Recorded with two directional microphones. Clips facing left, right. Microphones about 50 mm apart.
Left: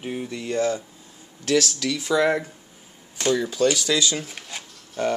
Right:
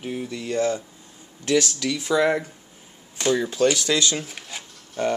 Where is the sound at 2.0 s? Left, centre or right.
Centre.